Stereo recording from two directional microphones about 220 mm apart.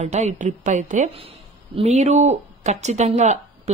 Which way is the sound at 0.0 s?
30° right (ahead or behind).